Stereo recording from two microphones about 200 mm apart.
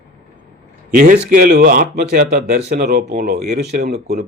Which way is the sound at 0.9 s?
45° right (ahead or behind).